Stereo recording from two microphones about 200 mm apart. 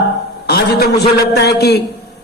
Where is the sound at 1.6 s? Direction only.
55° left (ahead or behind).